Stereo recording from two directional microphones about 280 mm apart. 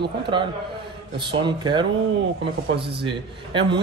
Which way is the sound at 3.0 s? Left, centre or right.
Centre.